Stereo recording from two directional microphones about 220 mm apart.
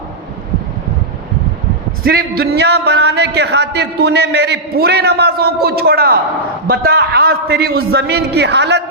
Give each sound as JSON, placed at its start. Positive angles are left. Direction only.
{"t": 2.0, "sound": "a man's voice", "side_deg": -45}